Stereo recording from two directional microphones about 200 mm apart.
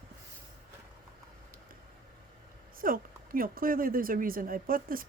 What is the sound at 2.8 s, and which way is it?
A woman's voice, 45° right (ahead or behind).